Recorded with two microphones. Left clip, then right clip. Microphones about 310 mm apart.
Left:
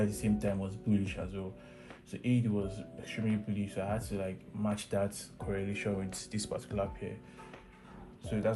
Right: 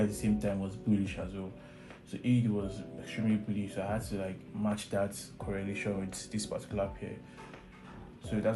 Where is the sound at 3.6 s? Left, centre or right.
Left.